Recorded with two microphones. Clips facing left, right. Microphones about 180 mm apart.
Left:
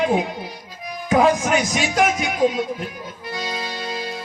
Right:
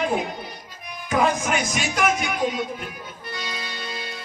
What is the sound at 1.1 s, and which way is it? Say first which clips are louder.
Music: left 5 dB; 40° left (ahead or behind).